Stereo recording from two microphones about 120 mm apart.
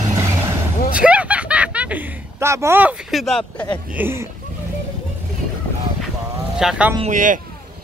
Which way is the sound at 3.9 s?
15° right (ahead or behind).